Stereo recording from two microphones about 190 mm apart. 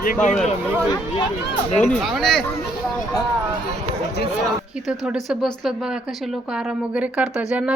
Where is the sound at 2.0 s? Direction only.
Centre (ahead or behind).